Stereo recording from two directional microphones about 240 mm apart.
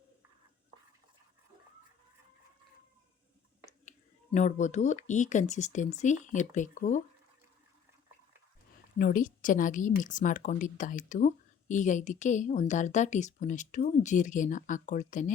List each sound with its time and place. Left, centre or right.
3.8 s a woman's voice: left
9.0 s a woman's voice: left